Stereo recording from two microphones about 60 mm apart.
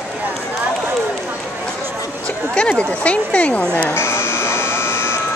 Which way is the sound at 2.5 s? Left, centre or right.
Centre.